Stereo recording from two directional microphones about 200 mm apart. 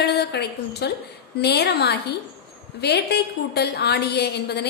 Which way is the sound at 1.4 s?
55° left (ahead or behind).